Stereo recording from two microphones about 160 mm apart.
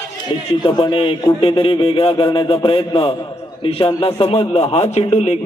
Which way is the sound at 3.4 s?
35° left (ahead or behind).